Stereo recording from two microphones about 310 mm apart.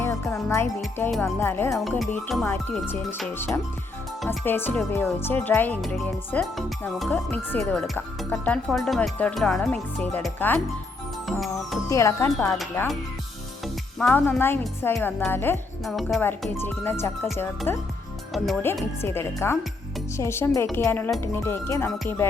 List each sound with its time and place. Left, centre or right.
0.0 s speech: centre
11.3 s music: centre
11.9 s speech: centre
14.0 s speech: centre